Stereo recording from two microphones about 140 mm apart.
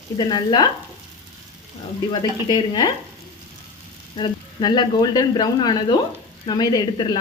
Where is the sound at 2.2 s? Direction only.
30° left (ahead or behind).